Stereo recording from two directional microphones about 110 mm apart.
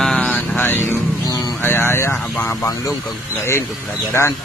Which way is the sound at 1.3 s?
35° left (ahead or behind).